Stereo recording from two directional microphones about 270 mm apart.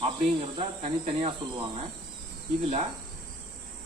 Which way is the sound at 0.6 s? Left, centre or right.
Right.